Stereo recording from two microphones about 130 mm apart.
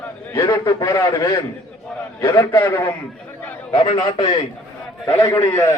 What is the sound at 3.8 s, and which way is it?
Speech, 45° left (ahead or behind).